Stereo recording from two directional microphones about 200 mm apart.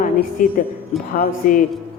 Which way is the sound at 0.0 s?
45° left (ahead or behind).